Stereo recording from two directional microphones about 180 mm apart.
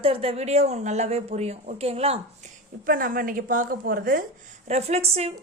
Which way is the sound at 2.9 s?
50° right (ahead or behind).